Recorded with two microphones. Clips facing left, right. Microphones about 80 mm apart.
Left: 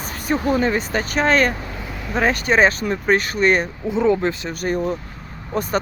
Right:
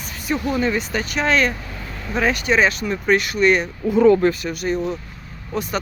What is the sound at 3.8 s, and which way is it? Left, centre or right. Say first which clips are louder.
Speech: right 6 dB; centre.